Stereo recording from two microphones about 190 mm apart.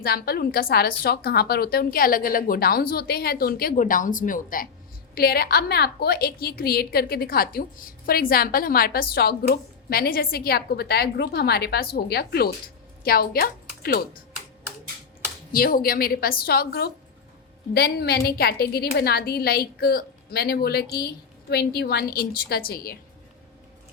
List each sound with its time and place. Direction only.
0.0 s a woman's voice: 55° left (ahead or behind)
15.5 s a woman's voice: 50° left (ahead or behind)